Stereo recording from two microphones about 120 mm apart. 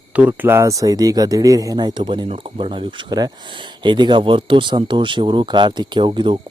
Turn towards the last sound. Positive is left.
turn(degrees=-40)  # may be behind; listen again after turning